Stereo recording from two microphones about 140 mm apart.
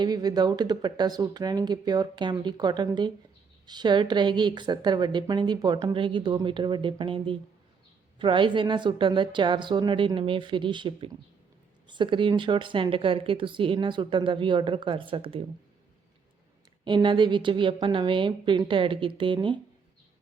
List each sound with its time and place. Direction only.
0.0 s a woman's voice: 30° right (ahead or behind)
16.8 s a woman's voice: 35° right (ahead or behind)